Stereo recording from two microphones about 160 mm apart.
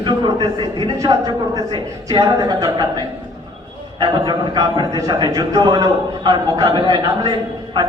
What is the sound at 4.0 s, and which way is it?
A man's voice, 25° right (ahead or behind).